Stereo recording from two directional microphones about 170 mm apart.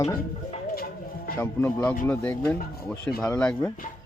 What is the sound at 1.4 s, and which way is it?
Speech, 10° left (ahead or behind).